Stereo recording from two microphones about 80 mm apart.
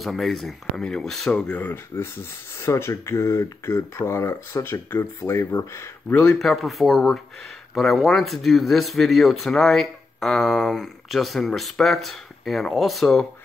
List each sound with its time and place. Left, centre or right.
0.0 s speech: centre
1.3 s speech: left
2.6 s speech: left
6.3 s speech: centre